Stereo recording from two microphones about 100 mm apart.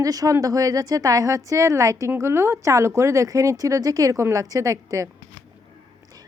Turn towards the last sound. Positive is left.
turn(degrees=-30)  # may be behind; listen again after turning